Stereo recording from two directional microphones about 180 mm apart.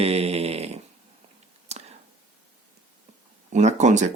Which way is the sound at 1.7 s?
35° right (ahead or behind).